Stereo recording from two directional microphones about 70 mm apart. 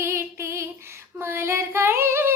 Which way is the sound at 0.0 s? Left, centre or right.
Right.